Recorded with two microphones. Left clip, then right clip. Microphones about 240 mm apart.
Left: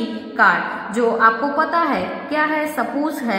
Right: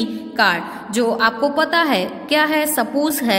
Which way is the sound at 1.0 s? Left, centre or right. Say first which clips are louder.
Left 2 dB; right.